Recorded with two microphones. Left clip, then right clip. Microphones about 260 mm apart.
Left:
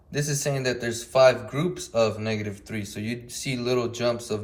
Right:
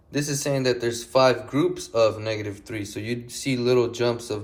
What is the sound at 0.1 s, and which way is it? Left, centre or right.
Speech, right.